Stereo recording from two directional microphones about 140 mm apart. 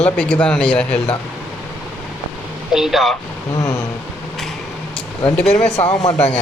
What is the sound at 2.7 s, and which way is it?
Speech, 5° right (ahead or behind).